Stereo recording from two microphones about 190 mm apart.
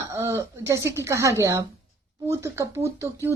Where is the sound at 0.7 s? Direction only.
15° right (ahead or behind).